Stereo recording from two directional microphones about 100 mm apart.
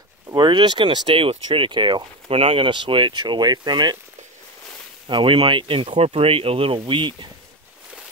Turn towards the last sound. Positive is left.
turn(degrees=-50)  # may be behind; listen again after turning